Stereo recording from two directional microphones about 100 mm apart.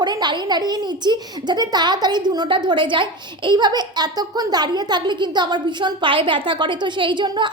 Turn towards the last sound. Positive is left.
turn(degrees=-50)  # may be behind; listen again after turning